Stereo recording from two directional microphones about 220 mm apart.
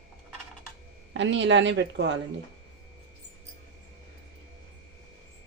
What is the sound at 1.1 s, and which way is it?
Speech, 55° right (ahead or behind).